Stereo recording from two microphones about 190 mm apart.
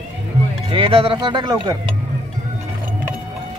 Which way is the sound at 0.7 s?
25° right (ahead or behind).